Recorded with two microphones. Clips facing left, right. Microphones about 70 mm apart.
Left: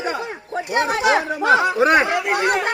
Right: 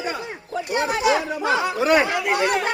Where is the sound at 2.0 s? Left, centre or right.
Left.